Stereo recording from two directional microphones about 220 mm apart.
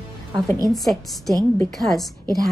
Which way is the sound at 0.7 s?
Centre (ahead or behind).